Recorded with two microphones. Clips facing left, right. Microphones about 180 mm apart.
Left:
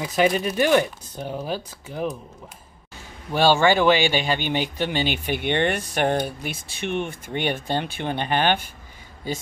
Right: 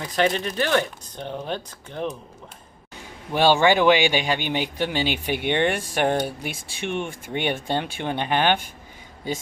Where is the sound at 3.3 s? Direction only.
15° right (ahead or behind).